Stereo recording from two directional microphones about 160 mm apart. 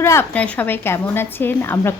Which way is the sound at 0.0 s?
15° left (ahead or behind).